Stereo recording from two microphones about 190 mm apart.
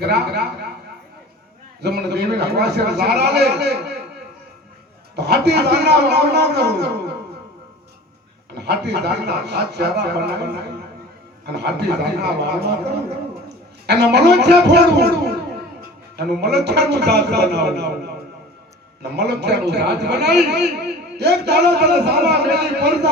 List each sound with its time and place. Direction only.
0.0 s a man's voice: 60° right (ahead or behind)
1.8 s a man's voice: 60° right (ahead or behind)
5.1 s a man's voice: 60° right (ahead or behind)
8.5 s a man's voice: 60° right (ahead or behind)